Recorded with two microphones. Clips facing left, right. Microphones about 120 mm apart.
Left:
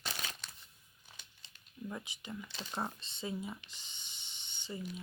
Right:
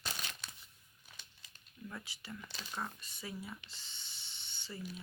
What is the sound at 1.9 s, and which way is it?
Speech, 20° left (ahead or behind).